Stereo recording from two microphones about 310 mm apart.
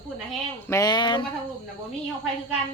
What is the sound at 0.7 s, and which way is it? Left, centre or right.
Speech, centre.